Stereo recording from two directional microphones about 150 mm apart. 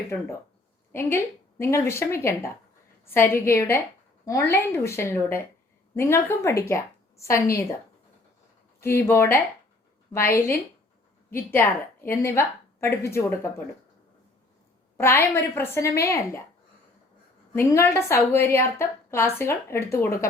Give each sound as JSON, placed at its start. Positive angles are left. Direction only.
{"t": 0.9, "sound": "a woman's voice", "side_deg": 15}
{"t": 8.8, "sound": "a woman's voice", "side_deg": 15}
{"t": 11.3, "sound": "a woman's voice", "side_deg": 15}
{"t": 14.9, "sound": "a woman's voice", "side_deg": 15}
{"t": 17.5, "sound": "a woman's voice", "side_deg": 15}